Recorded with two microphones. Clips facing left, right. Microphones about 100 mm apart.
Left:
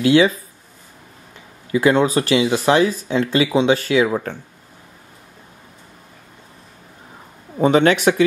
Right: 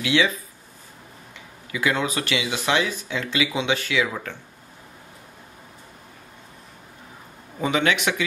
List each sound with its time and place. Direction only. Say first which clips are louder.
0.0 s speech: left 8 dB; 40° left (ahead or behind)
1.7 s speech: left 9 dB; 35° left (ahead or behind)
7.5 s speech: left 8 dB; 40° left (ahead or behind)